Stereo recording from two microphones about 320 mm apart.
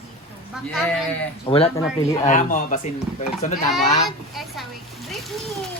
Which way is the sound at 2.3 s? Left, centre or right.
Left.